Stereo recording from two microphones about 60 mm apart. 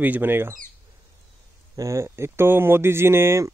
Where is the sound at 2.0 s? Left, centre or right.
Right.